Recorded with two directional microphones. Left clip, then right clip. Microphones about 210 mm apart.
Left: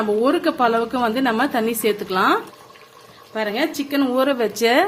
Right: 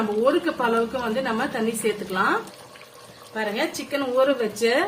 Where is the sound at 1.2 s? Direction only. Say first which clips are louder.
Left 6 dB; 50° left (ahead or behind).